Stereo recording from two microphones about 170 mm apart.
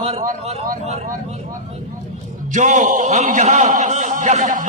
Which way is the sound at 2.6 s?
45° right (ahead or behind).